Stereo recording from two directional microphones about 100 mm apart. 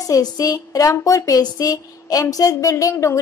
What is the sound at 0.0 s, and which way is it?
A woman's voice, 40° left (ahead or behind).